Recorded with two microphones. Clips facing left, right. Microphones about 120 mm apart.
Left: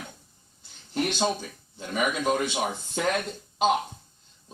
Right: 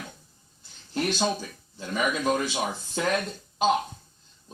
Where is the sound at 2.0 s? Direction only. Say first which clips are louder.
Even; 15° left (ahead or behind).